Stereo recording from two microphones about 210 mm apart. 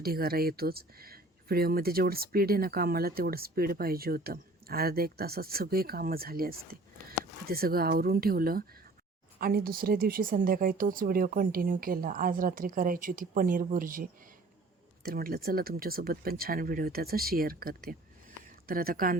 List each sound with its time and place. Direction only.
0.0 s speech: 45° right (ahead or behind)